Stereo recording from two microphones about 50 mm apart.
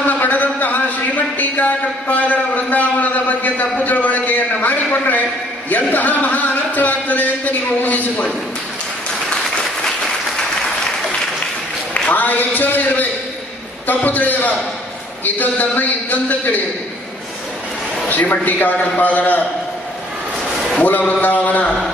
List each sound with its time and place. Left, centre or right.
0.0 s a sound: left
5.7 s a man's voice: left
12.1 s a man's voice: left
18.1 s a man's voice: left
21.0 s a man's voice: left